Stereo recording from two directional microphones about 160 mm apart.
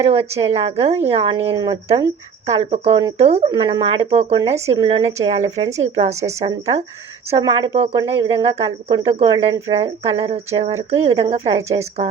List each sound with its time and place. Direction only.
0.1 s speech: 40° right (ahead or behind)
2.5 s speech: 45° right (ahead or behind)